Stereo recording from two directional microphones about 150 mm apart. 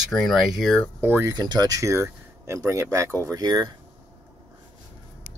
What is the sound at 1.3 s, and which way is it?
Speech, 25° right (ahead or behind).